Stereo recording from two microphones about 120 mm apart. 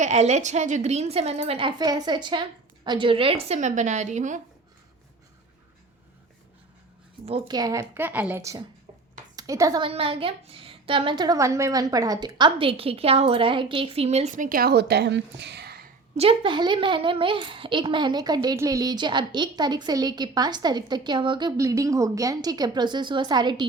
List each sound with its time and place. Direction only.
0.0 s a woman's voice: 70° right (ahead or behind)
7.4 s a woman's voice: 35° right (ahead or behind); by 8.4 s 15° right (ahead or behind)
8.4 s a woman's voice: 25° right (ahead or behind)
9.8 s a woman's voice: 50° right (ahead or behind)
11.3 s a woman's voice: 25° right (ahead or behind); by 14.5 s 80° right
16.1 s a woman's voice: 55° right (ahead or behind); by 21.5 s 40° right (ahead or behind)
21.6 s a woman's voice: 25° right (ahead or behind)